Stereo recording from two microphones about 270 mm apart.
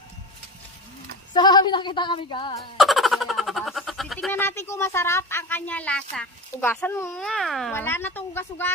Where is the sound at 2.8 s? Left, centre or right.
Centre.